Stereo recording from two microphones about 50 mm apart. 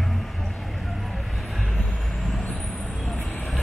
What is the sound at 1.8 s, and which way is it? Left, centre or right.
Vehicle, centre.